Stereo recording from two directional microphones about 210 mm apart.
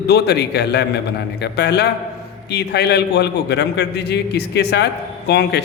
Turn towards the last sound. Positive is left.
turn(degrees=50)  # may be behind; listen again after turning